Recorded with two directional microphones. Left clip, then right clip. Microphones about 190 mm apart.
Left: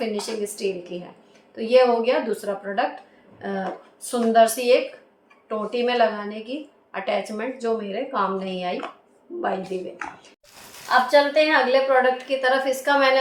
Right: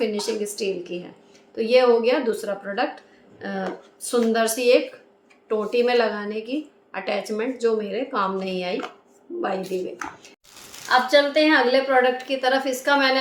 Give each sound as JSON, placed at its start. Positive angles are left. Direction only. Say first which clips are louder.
{"t": 0.2, "sound": "a woman's voice", "louder": "right 1 dB", "side_deg": -20}